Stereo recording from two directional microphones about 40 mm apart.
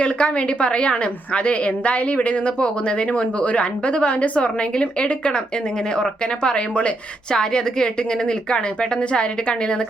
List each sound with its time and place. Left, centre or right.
0.0 s a woman's voice: left
7.3 s a woman's voice: centre